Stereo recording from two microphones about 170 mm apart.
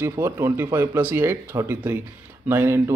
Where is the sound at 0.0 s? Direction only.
15° right (ahead or behind).